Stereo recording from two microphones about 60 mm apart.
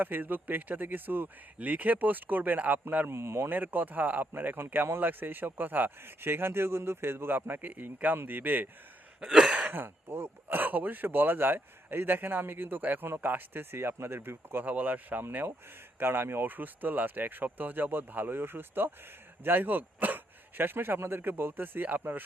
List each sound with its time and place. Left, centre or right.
0.0 s speech: right
3.2 s speech: right
3.5 s speech: right
9.2 s throat clearing: centre
9.6 s speech: right